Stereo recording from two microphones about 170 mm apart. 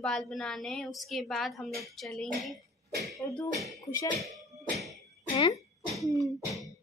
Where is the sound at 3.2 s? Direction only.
15° left (ahead or behind).